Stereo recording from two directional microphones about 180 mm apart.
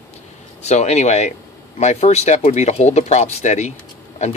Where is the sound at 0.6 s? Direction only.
40° left (ahead or behind).